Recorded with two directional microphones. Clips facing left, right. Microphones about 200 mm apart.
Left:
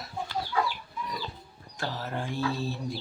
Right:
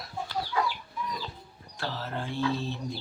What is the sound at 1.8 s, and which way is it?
Music, 15° left (ahead or behind).